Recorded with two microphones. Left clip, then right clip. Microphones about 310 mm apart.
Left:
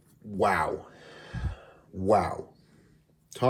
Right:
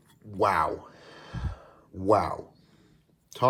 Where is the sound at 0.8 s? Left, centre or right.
Right.